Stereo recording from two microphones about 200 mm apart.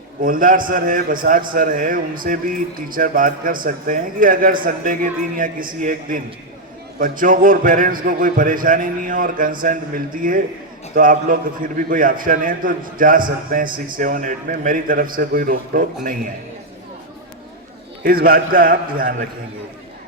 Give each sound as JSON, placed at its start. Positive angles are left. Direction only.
{"t": 0.2, "sound": "a man's voice", "side_deg": -45}
{"t": 18.0, "sound": "a man's voice", "side_deg": -50}